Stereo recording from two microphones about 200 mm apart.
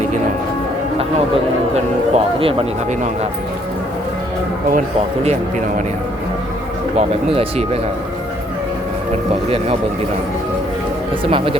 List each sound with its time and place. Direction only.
1.7 s a man's voice: 30° right (ahead or behind)
5.2 s a man's voice: 35° right (ahead or behind)
7.3 s speech: 30° right (ahead or behind)
11.3 s speech: 25° right (ahead or behind)